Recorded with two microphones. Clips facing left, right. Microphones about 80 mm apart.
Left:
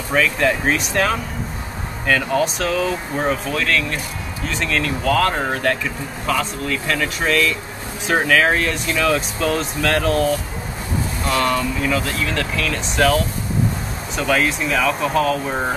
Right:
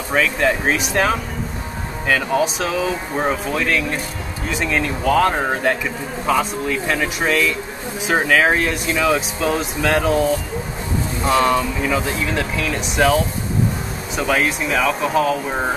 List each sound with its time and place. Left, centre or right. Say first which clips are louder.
0.1 s speech: even; centre